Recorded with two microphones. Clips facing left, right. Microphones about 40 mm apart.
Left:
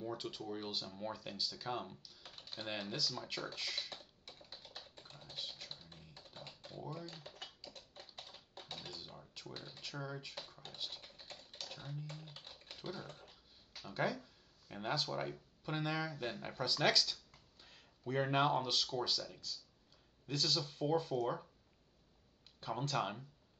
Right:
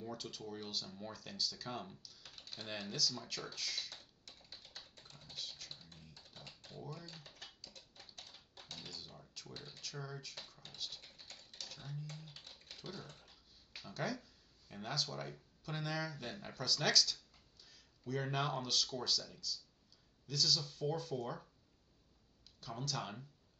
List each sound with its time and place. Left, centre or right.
0.0 s speech: centre
3.5 s typing: left
8.6 s speech: left
17.6 s speech: left
22.6 s speech: left